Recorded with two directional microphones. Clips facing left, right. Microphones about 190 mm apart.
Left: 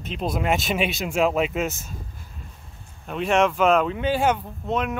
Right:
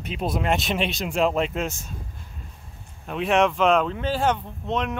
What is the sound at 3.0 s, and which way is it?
Speech, centre (ahead or behind).